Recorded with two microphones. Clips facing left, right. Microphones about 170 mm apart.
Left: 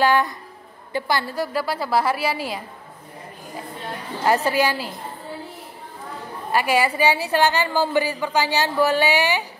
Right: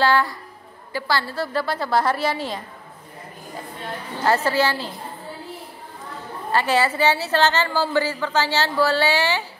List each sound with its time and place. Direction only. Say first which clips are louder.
0.0 s a woman's voice: left 1 dB; 20° left (ahead or behind)
4.3 s a woman's voice: even; 15° left (ahead or behind)
6.5 s a woman's voice: even; 10° left (ahead or behind)